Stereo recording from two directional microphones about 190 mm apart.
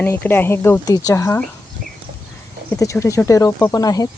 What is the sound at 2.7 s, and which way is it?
Speech, 15° left (ahead or behind).